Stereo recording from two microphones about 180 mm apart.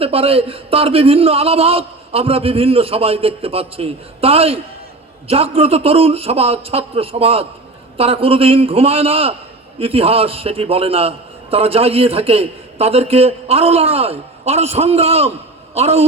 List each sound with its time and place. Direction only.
0.0 s a man's voice: 30° right (ahead or behind)